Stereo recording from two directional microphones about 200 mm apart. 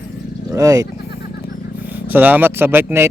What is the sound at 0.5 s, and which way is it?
Speech, 15° right (ahead or behind).